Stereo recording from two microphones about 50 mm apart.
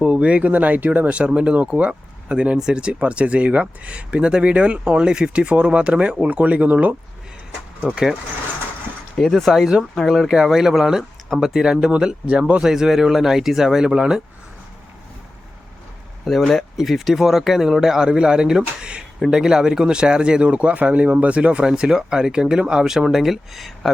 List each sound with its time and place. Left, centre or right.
0.0 s speech: right
7.8 s speech: centre
9.3 s speech: centre
9.6 s speech: centre
12.6 s speech: centre
16.3 s speech: centre; by 21.6 s right
21.6 s speech: centre